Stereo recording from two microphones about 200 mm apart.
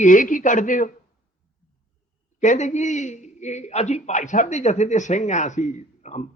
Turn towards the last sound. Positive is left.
turn(degrees=35)  # may be behind; listen again after turning